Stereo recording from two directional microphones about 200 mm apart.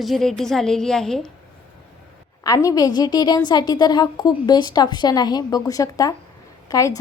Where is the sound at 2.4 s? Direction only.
15° left (ahead or behind).